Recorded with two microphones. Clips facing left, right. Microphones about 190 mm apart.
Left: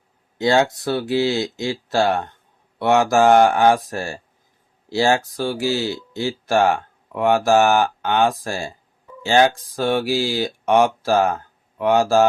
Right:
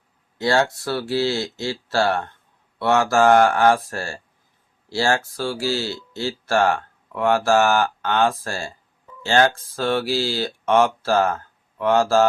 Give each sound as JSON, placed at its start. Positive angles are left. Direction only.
{"t": 0.3, "sound": "speech", "side_deg": 20}